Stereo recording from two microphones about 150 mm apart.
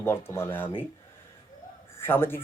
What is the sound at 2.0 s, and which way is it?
Speech, 15° left (ahead or behind).